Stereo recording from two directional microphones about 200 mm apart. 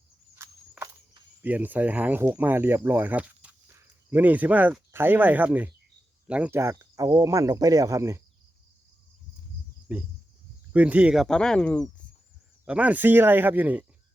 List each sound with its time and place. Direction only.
0.3 s walk: 15° right (ahead or behind)
1.4 s speech: 10° right (ahead or behind)
9.9 s speech: 5° right (ahead or behind)
12.6 s speech: 5° right (ahead or behind)